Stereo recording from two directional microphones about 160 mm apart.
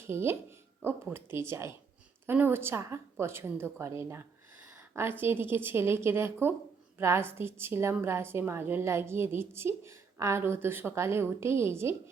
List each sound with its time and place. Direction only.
0.0 s a woman's voice: 15° right (ahead or behind)
4.7 s a sound: 15° right (ahead or behind)
5.2 s a woman's voice: 15° right (ahead or behind)